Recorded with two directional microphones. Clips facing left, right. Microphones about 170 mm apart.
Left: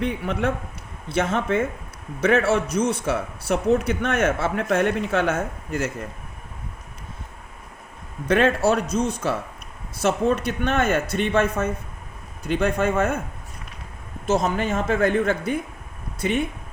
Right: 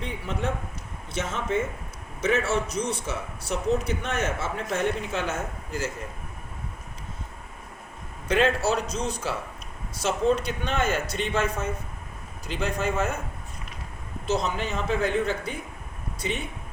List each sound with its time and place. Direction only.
0.0 s speech: 60° left (ahead or behind)
8.3 s speech: 55° left (ahead or behind)
14.3 s speech: 50° left (ahead or behind)